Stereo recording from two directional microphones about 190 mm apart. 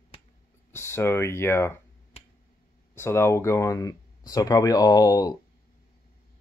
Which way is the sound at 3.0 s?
15° left (ahead or behind).